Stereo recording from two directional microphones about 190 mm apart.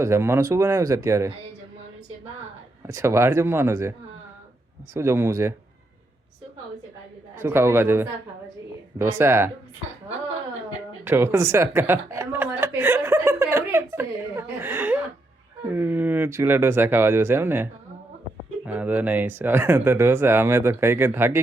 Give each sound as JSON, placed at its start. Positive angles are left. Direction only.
{"t": 0.0, "sound": "speech", "side_deg": -15}
{"t": 2.8, "sound": "speech", "side_deg": -15}
{"t": 4.9, "sound": "speech", "side_deg": -15}
{"t": 7.3, "sound": "speech", "side_deg": -15}
{"t": 11.0, "sound": "chuckle", "side_deg": -10}
{"t": 15.7, "sound": "speech", "side_deg": -10}